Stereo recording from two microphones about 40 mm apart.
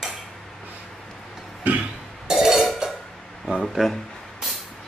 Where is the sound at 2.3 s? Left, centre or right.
Centre.